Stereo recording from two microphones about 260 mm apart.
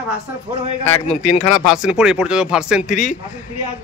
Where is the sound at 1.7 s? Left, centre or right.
Centre.